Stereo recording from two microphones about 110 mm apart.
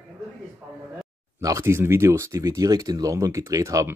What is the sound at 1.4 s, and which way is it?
Speech, 25° right (ahead or behind).